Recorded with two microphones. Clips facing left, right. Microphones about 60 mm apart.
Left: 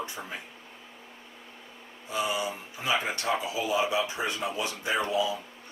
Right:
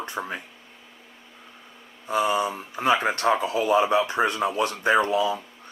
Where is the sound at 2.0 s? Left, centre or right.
Right.